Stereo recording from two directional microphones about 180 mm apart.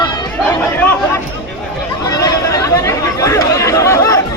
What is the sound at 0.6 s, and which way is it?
Chatter, 10° left (ahead or behind).